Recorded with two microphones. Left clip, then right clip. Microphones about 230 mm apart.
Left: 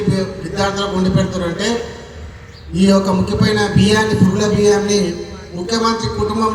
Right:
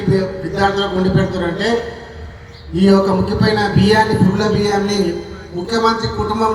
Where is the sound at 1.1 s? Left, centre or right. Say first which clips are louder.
Right 1 dB; left.